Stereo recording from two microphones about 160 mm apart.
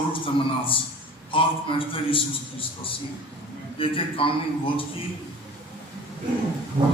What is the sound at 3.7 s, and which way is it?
Speech, 35° left (ahead or behind).